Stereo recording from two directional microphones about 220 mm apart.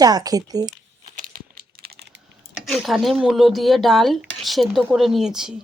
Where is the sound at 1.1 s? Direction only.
40° right (ahead or behind).